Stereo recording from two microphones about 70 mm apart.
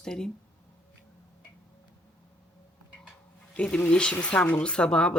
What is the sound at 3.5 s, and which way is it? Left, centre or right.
Speech, centre.